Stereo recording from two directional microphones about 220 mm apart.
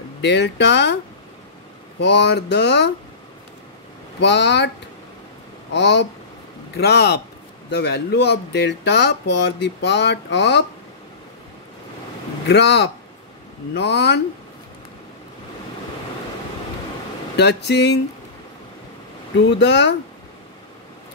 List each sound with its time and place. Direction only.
0.2 s speech: 50° left (ahead or behind)
2.0 s speech: 50° left (ahead or behind)
4.2 s speech: 50° left (ahead or behind)
5.7 s speech: 50° left (ahead or behind)
12.4 s speech: 50° left (ahead or behind)
17.4 s speech: 50° left (ahead or behind)
19.3 s speech: 50° left (ahead or behind)